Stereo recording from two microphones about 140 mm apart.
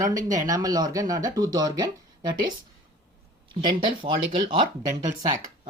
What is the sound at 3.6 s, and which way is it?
Speech, 35° right (ahead or behind).